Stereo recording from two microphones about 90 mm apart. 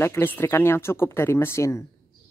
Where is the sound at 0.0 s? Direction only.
25° left (ahead or behind).